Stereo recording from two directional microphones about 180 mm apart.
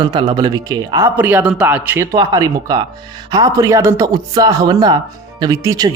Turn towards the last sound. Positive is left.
turn(degrees=-20)  # may be behind; listen again after turning